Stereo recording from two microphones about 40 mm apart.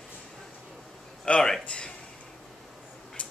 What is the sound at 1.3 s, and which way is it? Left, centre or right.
Speech, left.